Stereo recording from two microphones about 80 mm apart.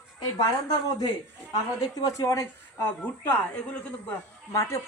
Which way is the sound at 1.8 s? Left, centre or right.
Left.